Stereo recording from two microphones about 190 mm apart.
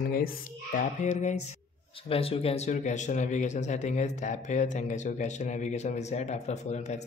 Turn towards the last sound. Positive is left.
turn(degrees=35)  # may be behind; listen again after turning